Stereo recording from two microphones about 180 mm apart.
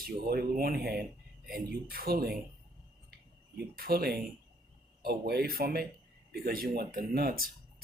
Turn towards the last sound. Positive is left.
turn(degrees=-55)  # may be behind; listen again after turning